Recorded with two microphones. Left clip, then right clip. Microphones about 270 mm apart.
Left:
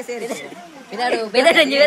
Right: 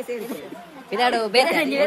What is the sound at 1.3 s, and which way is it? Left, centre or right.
Speech, left.